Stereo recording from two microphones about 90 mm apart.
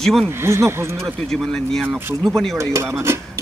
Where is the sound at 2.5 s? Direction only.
30° right (ahead or behind).